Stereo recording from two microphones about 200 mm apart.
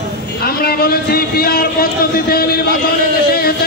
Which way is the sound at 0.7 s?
50° left (ahead or behind).